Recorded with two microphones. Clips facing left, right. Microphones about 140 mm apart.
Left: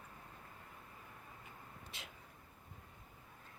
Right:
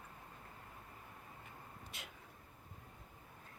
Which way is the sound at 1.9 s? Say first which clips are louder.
Even; centre (ahead or behind).